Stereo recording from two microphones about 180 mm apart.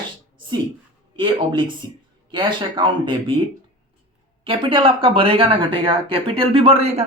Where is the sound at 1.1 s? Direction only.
25° right (ahead or behind).